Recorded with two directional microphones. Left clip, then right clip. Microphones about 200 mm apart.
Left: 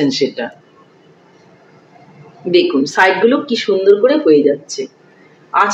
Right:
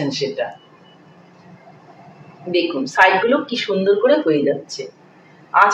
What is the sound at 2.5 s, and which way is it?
Speech, 55° left (ahead or behind).